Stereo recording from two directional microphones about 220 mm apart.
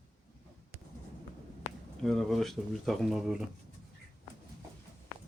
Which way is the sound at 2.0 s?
Centre (ahead or behind).